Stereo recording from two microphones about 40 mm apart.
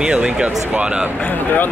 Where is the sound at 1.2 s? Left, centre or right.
Left.